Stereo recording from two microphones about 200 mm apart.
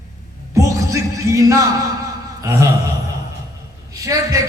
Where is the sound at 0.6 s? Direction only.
15° right (ahead or behind).